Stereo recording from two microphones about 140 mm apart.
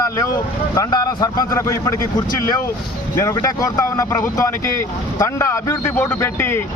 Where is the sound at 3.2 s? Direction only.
25° left (ahead or behind).